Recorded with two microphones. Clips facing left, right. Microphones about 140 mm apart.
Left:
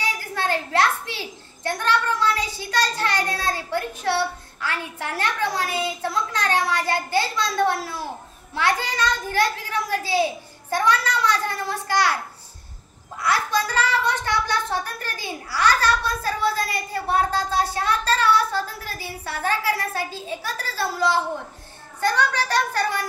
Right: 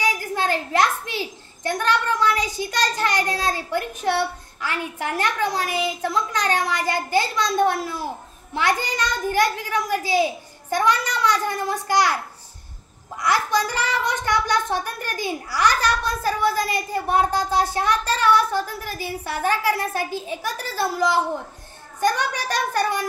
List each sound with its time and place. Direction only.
0.0 s a child's voice: 15° right (ahead or behind)
13.2 s a child's voice: 15° right (ahead or behind)